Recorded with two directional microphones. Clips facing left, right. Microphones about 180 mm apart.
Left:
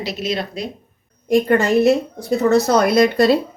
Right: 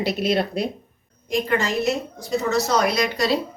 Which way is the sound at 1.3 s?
55° left (ahead or behind).